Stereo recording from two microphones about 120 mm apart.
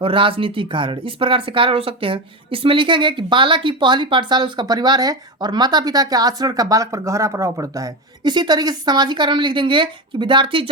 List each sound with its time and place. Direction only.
0.0 s speech: 45° right (ahead or behind)